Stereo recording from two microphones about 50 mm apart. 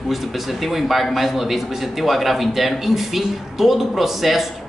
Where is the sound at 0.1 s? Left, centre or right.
Centre.